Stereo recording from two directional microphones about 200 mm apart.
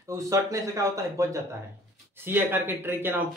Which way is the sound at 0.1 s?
15° right (ahead or behind).